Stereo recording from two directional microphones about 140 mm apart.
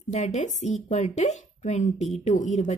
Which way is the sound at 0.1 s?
55° left (ahead or behind).